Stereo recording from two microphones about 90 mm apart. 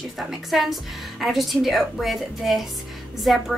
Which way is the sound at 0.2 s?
Centre (ahead or behind).